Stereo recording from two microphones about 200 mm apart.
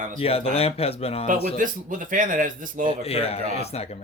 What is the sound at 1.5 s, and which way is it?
A man's voice, 40° right (ahead or behind).